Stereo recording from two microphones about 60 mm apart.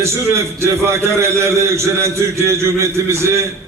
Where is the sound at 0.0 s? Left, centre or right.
Right.